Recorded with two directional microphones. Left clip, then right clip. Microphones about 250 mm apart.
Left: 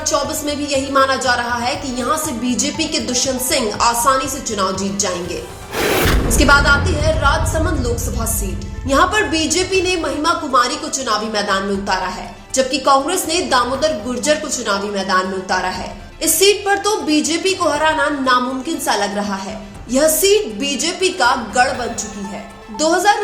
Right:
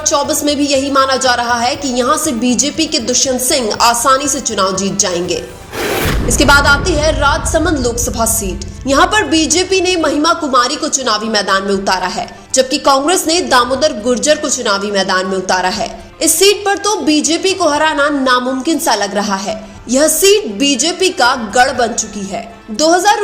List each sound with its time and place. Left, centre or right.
0.0 s a woman's voice: right
5.8 s a sound: centre
6.3 s a woman's voice: right